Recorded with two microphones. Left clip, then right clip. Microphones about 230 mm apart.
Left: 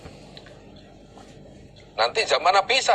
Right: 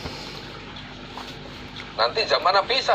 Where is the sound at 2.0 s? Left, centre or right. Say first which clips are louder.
Even; left.